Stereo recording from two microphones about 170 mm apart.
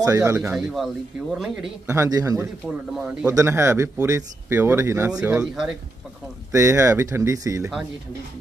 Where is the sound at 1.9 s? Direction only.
20° right (ahead or behind).